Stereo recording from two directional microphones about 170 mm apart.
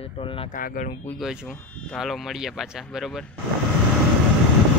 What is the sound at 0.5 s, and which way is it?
Speech, 50° left (ahead or behind).